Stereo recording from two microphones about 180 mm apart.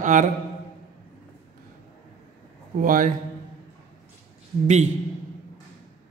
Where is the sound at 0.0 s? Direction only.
45° right (ahead or behind).